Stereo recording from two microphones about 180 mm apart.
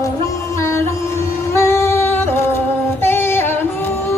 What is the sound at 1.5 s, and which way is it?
Singing, 15° left (ahead or behind).